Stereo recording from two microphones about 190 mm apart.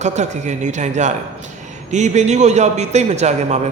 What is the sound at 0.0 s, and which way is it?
A man's voice, 35° right (ahead or behind).